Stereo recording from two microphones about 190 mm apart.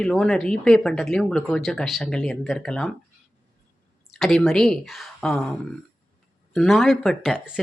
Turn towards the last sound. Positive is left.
turn(degrees=0)  # may be behind; listen again after turning